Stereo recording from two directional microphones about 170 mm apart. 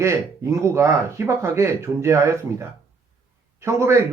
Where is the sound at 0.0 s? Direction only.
15° right (ahead or behind).